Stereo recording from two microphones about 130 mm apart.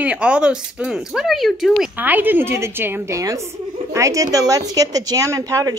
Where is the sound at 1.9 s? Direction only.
15° right (ahead or behind).